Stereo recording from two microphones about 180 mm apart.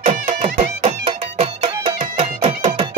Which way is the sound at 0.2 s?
45° right (ahead or behind).